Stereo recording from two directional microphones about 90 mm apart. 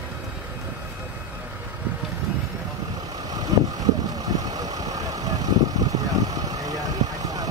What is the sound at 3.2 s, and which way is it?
Vehicle, 45° right (ahead or behind).